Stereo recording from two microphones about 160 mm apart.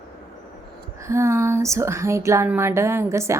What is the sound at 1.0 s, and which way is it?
Speech, 15° right (ahead or behind).